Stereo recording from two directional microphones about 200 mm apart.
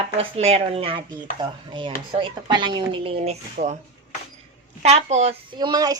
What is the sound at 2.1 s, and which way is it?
A woman's voice, 25° right (ahead or behind).